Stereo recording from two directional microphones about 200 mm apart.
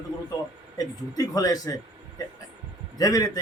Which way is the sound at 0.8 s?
20° left (ahead or behind).